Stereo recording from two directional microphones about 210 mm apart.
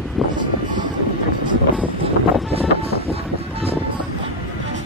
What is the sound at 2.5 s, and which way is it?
Music, 30° right (ahead or behind).